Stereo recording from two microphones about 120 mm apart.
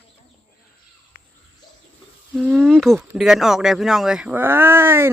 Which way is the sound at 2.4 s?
Centre (ahead or behind).